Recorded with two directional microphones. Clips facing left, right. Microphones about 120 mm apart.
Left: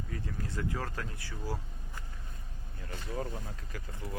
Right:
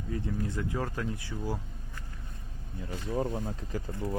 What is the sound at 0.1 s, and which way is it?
Speech, 20° right (ahead or behind).